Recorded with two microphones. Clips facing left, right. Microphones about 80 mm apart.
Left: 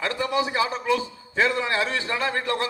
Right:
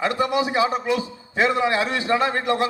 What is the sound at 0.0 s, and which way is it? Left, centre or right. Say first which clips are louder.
A man's voice: right 3 dB; right.